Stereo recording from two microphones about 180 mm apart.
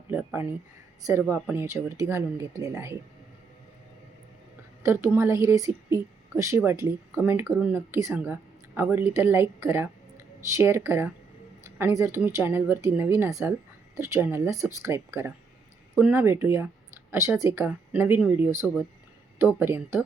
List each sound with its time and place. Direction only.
0.1 s a sound: 10° right (ahead or behind)
1.2 s a woman's voice: 10° right (ahead or behind)
4.8 s a woman's voice: 15° right (ahead or behind)